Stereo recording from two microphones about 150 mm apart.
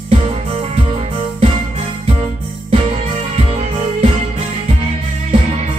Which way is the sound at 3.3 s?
45° right (ahead or behind).